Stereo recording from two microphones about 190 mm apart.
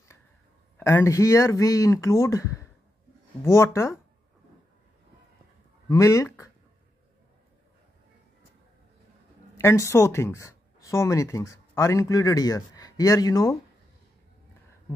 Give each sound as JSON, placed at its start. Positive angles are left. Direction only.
{"t": 0.7, "sound": "speech", "side_deg": 15}
{"t": 5.9, "sound": "speech", "side_deg": 15}
{"t": 9.6, "sound": "speech", "side_deg": 15}